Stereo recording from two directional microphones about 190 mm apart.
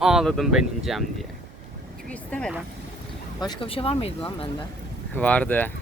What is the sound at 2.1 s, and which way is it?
Speech, 5° left (ahead or behind).